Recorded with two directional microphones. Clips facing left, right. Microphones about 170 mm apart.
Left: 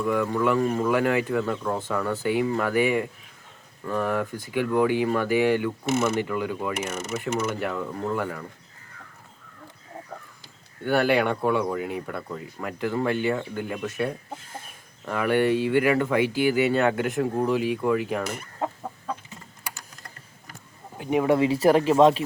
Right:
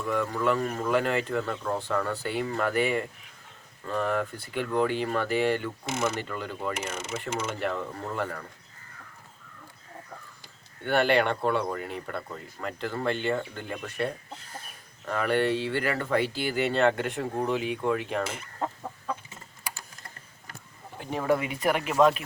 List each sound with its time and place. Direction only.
0.1 s speech: 5° left (ahead or behind)
10.8 s speech: 5° left (ahead or behind)
21.0 s speech: 15° left (ahead or behind)
21.3 s speech: 30° left (ahead or behind)